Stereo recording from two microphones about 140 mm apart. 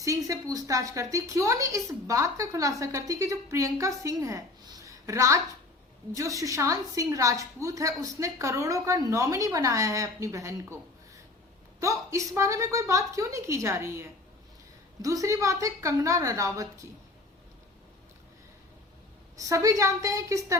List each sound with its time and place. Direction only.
0.0 s a woman's voice: 25° right (ahead or behind)
4.9 s a sound: 20° right (ahead or behind)
6.1 s a woman's voice: 25° right (ahead or behind)
11.8 s a woman's voice: 20° right (ahead or behind)
19.4 s a woman's voice: 25° right (ahead or behind)